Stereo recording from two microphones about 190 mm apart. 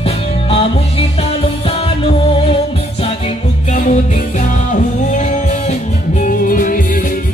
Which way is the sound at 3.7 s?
40° left (ahead or behind).